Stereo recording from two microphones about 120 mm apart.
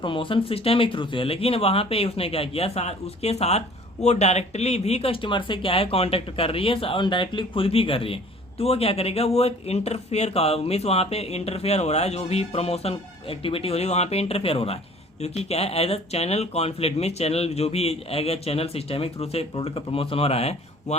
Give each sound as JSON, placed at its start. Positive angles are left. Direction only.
{"t": 0.0, "sound": "speech", "side_deg": 45}